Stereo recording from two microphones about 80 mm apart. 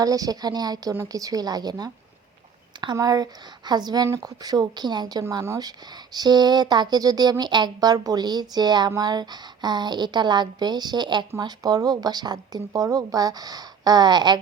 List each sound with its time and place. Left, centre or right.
0.0 s speech: right
3.7 s speech: right
11.3 s speech: right